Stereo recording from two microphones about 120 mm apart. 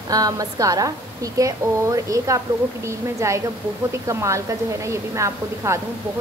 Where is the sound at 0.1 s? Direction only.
30° right (ahead or behind).